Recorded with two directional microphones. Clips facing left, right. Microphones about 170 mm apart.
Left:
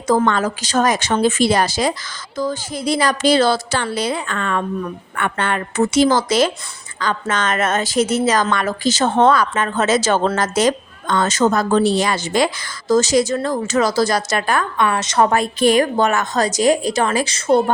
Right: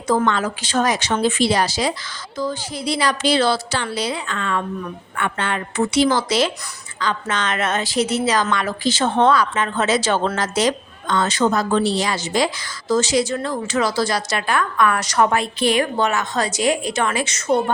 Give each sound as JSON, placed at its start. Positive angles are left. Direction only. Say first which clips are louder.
{"t": 0.3, "sound": "a woman's voice", "louder": "left 2 dB", "side_deg": 45}
{"t": 12.9, "sound": "a woman's voice", "louder": "left 3 dB", "side_deg": 45}
{"t": 14.6, "sound": "a woman's voice", "louder": "even", "side_deg": 25}
{"t": 15.3, "sound": "a woman's voice", "louder": "left 4 dB", "side_deg": 45}